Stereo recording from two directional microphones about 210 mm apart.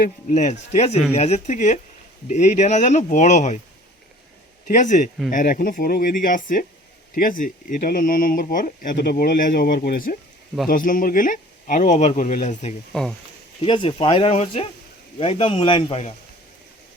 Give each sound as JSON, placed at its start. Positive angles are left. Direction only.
{"t": 0.3, "sound": "speech", "side_deg": 35}
{"t": 4.7, "sound": "speech", "side_deg": 35}
{"t": 12.9, "sound": "speech", "side_deg": 0}
{"t": 13.6, "sound": "speech", "side_deg": 25}